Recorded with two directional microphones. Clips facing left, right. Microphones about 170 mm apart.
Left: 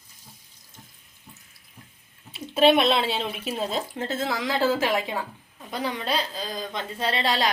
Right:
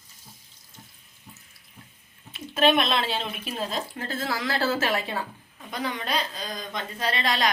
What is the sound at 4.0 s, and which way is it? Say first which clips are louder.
Speech: left 2 dB; 20° left (ahead or behind).